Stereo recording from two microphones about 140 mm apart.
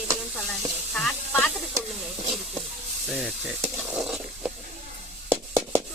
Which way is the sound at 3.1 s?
Centre (ahead or behind).